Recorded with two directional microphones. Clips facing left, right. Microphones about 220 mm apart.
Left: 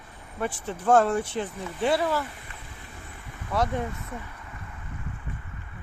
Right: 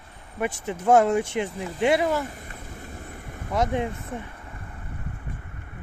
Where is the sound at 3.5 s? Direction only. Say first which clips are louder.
Right 2 dB; 20° right (ahead or behind).